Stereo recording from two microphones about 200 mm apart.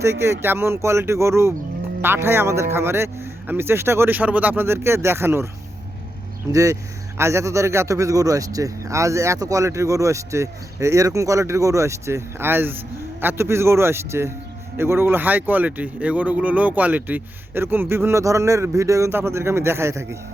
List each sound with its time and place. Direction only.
0.0 s a man's voice: 10° right (ahead or behind)
6.5 s a man's voice: 15° right (ahead or behind)